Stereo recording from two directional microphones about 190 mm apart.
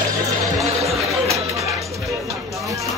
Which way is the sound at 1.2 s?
15° right (ahead or behind).